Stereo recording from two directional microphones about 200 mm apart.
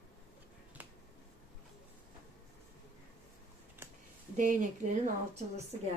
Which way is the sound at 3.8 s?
10° right (ahead or behind).